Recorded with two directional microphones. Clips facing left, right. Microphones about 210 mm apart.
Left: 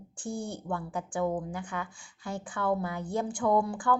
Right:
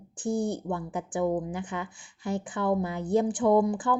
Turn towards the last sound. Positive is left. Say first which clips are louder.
# right 4 dB
turn(degrees=-20)  # may be behind; listen again after turning